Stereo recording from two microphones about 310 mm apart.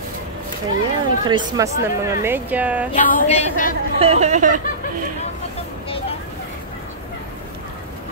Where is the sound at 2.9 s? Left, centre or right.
Left.